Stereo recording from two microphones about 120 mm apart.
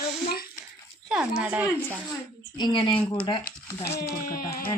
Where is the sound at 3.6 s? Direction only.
20° left (ahead or behind).